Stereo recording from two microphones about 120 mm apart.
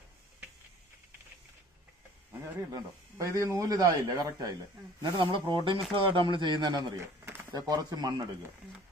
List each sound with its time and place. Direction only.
2.6 s speech: 30° right (ahead or behind)
7.0 s a sound: 20° right (ahead or behind)
7.5 s speech: 30° right (ahead or behind)